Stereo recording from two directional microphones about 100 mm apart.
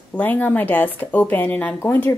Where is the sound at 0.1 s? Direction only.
15° left (ahead or behind).